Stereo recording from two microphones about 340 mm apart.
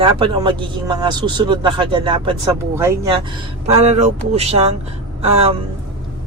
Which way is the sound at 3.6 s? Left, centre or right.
Centre.